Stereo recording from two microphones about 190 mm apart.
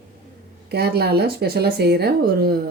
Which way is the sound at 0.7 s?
60° right (ahead or behind).